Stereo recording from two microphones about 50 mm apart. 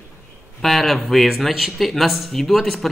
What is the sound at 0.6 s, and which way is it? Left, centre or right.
Speech, centre.